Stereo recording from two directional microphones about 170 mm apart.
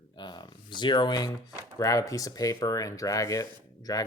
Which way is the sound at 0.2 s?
25° left (ahead or behind).